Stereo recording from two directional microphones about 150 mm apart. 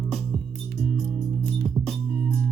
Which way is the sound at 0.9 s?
5° left (ahead or behind).